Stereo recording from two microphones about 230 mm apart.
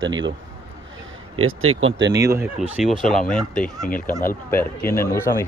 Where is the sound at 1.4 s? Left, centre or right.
Right.